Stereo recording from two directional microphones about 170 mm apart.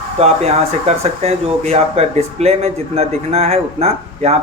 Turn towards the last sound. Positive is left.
turn(degrees=-40)  # may be behind; listen again after turning